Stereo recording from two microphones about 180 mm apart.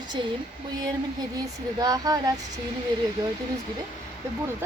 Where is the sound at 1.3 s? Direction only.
20° right (ahead or behind).